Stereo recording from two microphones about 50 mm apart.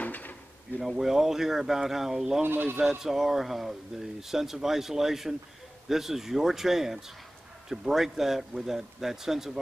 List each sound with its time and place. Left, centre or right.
0.0 s drawer open or close: left
0.7 s speech: centre
2.4 s speech: right
2.8 s speech: centre